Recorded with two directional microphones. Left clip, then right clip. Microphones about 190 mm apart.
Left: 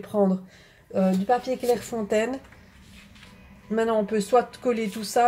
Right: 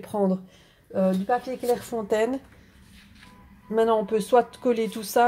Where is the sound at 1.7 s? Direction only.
20° right (ahead or behind).